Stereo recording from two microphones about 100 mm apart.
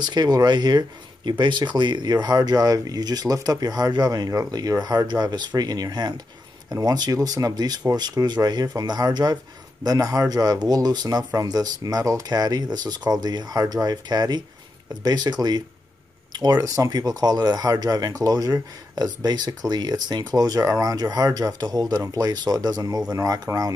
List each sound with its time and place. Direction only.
0.0 s speech: 45° right (ahead or behind)